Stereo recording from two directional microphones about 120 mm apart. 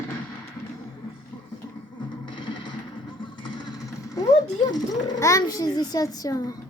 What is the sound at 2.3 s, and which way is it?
Music, 40° left (ahead or behind).